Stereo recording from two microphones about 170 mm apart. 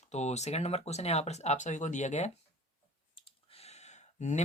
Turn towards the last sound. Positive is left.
turn(degrees=45)  # may be behind; listen again after turning